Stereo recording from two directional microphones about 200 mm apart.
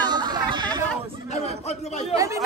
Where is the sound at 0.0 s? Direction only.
20° right (ahead or behind).